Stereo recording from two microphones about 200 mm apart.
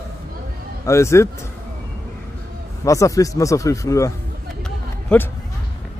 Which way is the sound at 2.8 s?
15° left (ahead or behind).